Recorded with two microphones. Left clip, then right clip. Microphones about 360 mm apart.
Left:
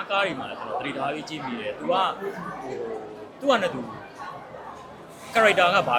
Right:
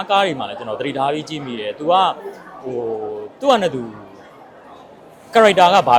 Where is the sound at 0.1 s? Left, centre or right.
Right.